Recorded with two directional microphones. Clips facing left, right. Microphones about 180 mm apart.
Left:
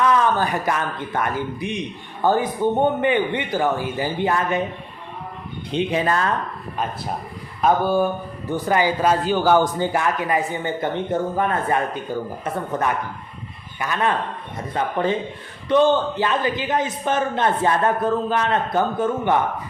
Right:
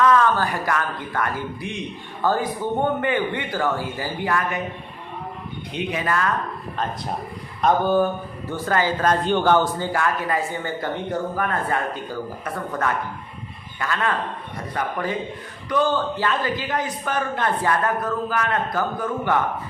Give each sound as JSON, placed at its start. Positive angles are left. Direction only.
{"t": 0.0, "sound": "a man's voice", "side_deg": 20}
{"t": 5.7, "sound": "a man's voice", "side_deg": 30}
{"t": 7.6, "sound": "a man's voice", "side_deg": 10}